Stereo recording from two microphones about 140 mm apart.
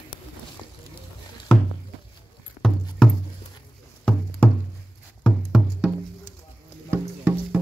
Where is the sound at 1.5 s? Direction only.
5° left (ahead or behind).